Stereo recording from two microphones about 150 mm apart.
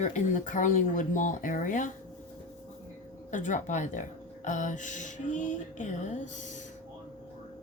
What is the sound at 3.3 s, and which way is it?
Speech, 55° left (ahead or behind).